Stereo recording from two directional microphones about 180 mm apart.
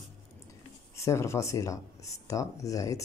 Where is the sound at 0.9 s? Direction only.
15° left (ahead or behind).